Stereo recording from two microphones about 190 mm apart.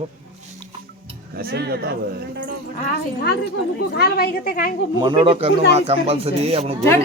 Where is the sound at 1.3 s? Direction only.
55° right (ahead or behind).